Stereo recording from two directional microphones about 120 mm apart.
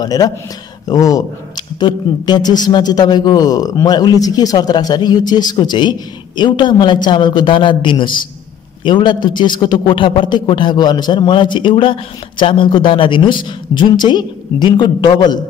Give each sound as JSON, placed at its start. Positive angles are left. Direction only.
{"t": 0.0, "sound": "a man's voice", "side_deg": 35}